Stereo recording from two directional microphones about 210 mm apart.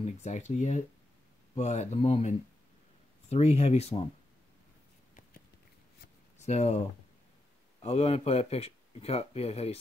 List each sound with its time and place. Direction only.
0.0 s speech: 35° left (ahead or behind)
6.4 s speech: 30° left (ahead or behind)
7.8 s speech: 30° left (ahead or behind)